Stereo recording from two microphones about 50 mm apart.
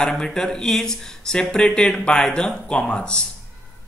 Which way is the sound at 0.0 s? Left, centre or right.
Centre.